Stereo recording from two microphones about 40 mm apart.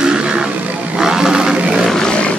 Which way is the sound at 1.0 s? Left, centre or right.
Centre.